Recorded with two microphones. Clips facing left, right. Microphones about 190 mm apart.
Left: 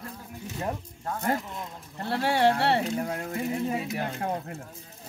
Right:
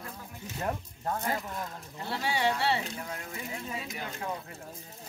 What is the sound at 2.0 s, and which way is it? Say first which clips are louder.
Speech: left 7 dB; 60° left (ahead or behind).